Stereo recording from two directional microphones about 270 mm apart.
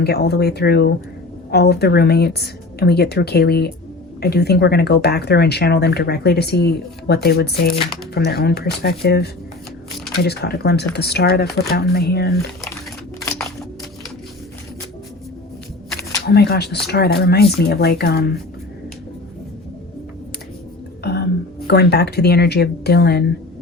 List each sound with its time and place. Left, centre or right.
0.0 s speech: left
13.2 s music: centre
16.3 s speech: left
21.0 s a sound: left
21.7 s speech: left